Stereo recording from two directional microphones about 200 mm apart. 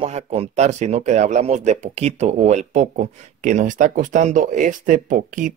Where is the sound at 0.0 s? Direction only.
30° right (ahead or behind).